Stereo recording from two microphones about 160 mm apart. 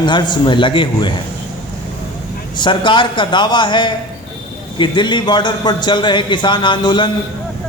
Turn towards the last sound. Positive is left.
turn(degrees=30)  # may be behind; listen again after turning